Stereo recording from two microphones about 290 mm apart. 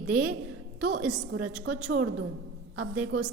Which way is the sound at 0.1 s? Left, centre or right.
Centre.